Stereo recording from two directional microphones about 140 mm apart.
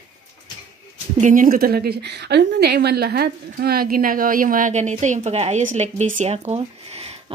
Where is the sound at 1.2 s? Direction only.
70° right (ahead or behind); by 1.9 s 90° right.